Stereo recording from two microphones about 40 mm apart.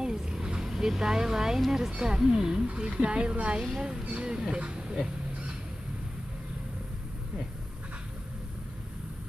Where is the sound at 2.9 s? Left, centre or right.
Right.